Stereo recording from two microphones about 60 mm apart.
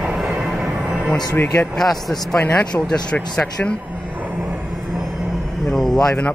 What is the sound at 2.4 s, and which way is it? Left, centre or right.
A man's voice, left.